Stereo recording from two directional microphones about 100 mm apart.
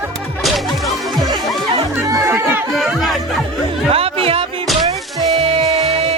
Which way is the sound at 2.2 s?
20° right (ahead or behind).